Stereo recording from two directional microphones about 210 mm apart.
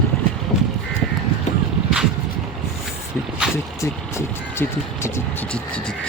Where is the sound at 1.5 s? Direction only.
35° left (ahead or behind).